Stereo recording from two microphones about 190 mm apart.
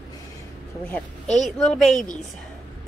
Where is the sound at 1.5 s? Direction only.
Centre (ahead or behind).